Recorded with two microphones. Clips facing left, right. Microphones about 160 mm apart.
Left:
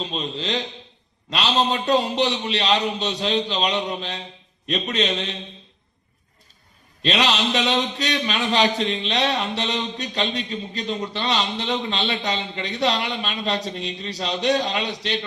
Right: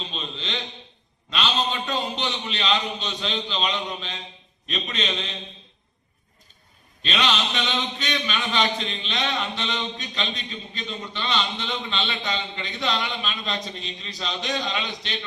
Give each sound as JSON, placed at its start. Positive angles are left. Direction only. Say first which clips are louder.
{"t": 0.0, "sound": "a man's voice", "louder": "left 7 dB", "side_deg": 35}
{"t": 7.0, "sound": "a man's voice", "louder": "left 4 dB", "side_deg": 35}